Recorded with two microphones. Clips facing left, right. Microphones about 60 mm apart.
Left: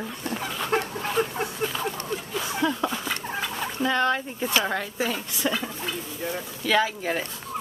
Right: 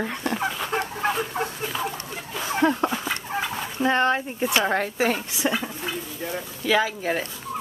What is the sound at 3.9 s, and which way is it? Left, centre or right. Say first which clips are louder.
Speech: right 3 dB; right.